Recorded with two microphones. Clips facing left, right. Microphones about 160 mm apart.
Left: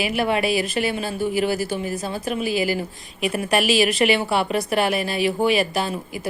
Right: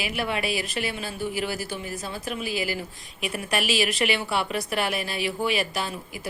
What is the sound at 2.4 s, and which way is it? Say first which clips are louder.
Speech: left 7 dB; centre (ahead or behind).